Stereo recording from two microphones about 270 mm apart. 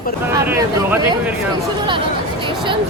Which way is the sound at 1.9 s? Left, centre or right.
Centre.